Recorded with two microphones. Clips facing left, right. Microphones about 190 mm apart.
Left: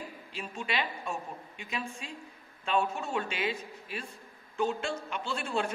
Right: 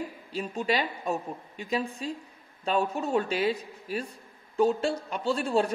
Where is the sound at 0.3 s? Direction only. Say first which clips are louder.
Right 8 dB; 40° right (ahead or behind).